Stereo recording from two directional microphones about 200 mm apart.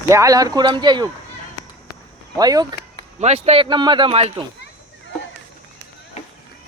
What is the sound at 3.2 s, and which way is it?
A man's voice, 35° right (ahead or behind).